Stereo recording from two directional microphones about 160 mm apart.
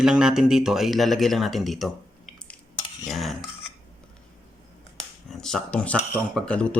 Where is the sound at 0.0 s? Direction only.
5° right (ahead or behind).